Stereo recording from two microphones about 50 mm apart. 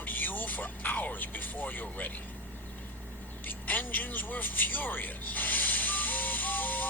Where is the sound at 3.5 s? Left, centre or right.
Left.